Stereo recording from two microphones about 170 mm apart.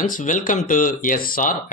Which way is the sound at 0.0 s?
50° left (ahead or behind).